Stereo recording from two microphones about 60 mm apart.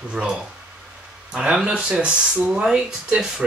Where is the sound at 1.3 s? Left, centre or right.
Centre.